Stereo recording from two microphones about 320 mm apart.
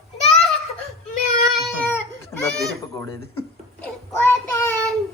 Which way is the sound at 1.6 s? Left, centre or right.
Centre.